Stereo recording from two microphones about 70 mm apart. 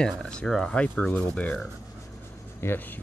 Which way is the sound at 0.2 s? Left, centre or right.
Centre.